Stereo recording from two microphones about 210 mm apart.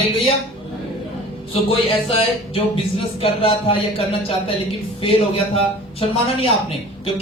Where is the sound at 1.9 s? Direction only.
30° left (ahead or behind).